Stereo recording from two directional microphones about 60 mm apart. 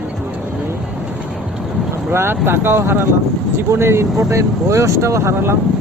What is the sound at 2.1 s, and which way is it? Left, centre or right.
Speech, right.